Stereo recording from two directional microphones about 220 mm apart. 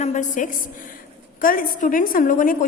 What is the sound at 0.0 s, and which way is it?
A woman's voice, 35° left (ahead or behind).